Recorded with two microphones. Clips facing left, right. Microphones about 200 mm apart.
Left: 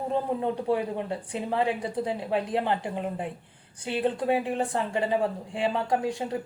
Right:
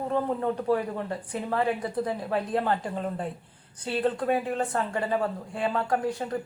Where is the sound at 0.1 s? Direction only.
15° left (ahead or behind).